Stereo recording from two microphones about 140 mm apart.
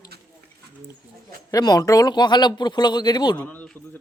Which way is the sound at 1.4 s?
25° left (ahead or behind).